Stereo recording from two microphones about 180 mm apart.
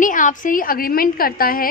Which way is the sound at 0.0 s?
45° left (ahead or behind).